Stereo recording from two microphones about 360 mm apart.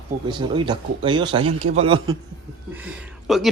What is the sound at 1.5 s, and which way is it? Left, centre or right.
Speech, right.